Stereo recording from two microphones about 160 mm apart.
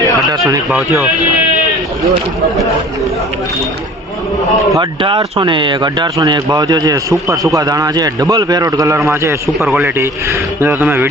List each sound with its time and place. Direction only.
0.3 s speech: 25° right (ahead or behind)
0.7 s speech: centre (ahead or behind)
4.7 s speech: 30° right (ahead or behind)
9.6 s speech: centre (ahead or behind)
9.8 s a man's voice: 15° right (ahead or behind)